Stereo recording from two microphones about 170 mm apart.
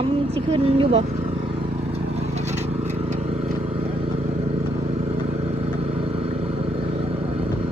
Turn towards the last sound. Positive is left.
turn(degrees=-35)  # may be behind; listen again after turning